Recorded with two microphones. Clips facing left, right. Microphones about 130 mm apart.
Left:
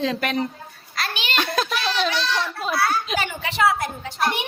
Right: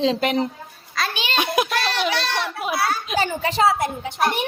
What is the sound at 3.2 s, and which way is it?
A woman's voice, 35° right (ahead or behind).